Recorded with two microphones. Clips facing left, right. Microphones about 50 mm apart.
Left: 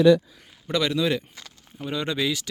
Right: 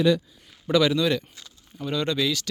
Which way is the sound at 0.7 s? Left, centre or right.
Centre.